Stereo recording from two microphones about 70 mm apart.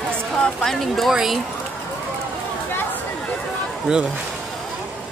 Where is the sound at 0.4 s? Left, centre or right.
Centre.